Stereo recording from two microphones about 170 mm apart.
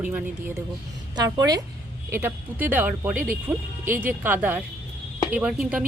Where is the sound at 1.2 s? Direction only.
25° right (ahead or behind).